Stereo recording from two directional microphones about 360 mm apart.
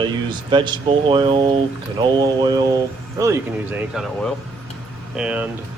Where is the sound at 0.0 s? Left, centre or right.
Centre.